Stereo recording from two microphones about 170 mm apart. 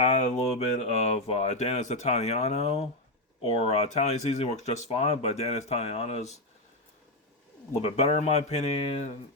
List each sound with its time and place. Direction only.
0.0 s a sound: 40° left (ahead or behind)
0.8 s speech: 40° left (ahead or behind)
7.8 s speech: 40° left (ahead or behind)